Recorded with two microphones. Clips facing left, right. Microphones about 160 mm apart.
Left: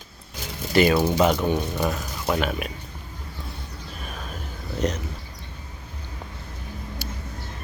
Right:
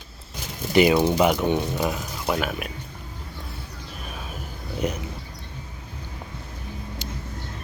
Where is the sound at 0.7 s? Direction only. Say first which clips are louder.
Right 1 dB; 15° right (ahead or behind).